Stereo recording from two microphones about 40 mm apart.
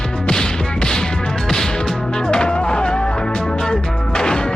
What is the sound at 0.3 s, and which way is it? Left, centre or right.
Music, centre.